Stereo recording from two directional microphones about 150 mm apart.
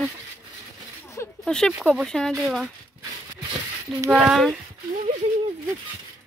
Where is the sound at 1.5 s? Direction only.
5° left (ahead or behind).